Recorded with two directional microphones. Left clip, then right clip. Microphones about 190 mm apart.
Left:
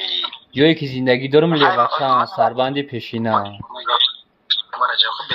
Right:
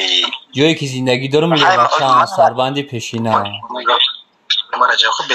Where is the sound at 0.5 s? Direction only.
15° right (ahead or behind).